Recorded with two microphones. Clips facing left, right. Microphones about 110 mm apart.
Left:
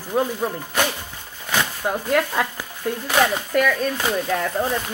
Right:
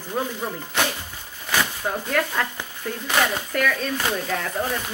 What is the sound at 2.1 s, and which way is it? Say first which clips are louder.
Speech: left 4 dB; 10° left (ahead or behind).